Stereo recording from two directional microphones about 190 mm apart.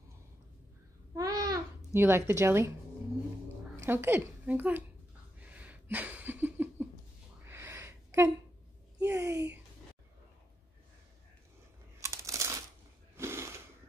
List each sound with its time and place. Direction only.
1.1 s babbling: 20° right (ahead or behind)
2.0 s a woman's voice: 10° right (ahead or behind)
3.8 s a woman's voice: 10° right (ahead or behind)
5.4 s a sound: 5° right (ahead or behind)
9.0 s a woman's voice: 15° right (ahead or behind)
12.0 s crumpling: 15° right (ahead or behind)
13.2 s a sound: 15° right (ahead or behind)